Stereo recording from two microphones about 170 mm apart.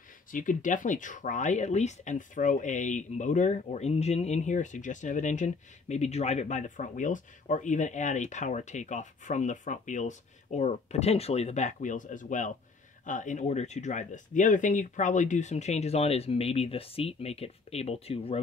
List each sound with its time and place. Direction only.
0.3 s speech: 50° left (ahead or behind); by 18.4 s 35° left (ahead or behind)